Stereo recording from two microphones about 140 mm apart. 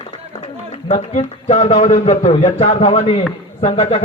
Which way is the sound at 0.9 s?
50° left (ahead or behind).